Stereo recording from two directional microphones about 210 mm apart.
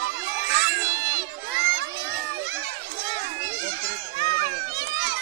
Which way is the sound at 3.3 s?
60° right (ahead or behind).